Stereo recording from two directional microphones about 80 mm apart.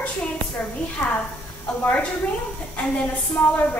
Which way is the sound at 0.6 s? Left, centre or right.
Centre.